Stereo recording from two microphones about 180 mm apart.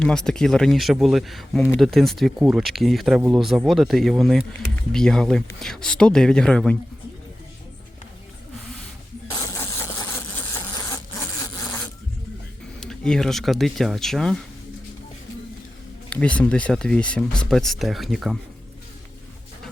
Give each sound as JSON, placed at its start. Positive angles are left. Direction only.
{"t": 0.0, "sound": "speech", "side_deg": 5}
{"t": 9.3, "sound": "a sound", "side_deg": 15}
{"t": 12.8, "sound": "speech", "side_deg": 5}
{"t": 16.0, "sound": "speech", "side_deg": 5}